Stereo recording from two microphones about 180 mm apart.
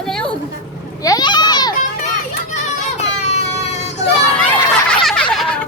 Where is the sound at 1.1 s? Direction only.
25° left (ahead or behind).